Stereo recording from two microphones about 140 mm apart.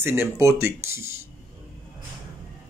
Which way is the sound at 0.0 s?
15° right (ahead or behind).